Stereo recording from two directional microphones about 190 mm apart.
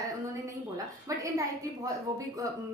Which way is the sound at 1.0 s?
15° right (ahead or behind).